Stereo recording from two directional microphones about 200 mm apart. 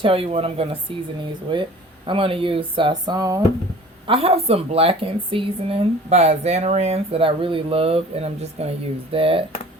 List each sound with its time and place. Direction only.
0.0 s speech: 25° right (ahead or behind)